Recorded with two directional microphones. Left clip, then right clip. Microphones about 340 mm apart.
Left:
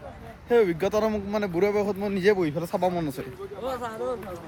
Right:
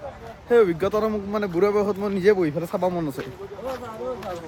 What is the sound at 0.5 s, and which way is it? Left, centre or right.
Speech, centre.